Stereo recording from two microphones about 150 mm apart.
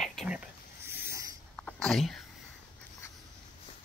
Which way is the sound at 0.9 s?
15° right (ahead or behind).